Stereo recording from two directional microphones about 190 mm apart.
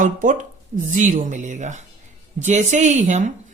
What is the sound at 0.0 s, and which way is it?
Speech, 40° right (ahead or behind).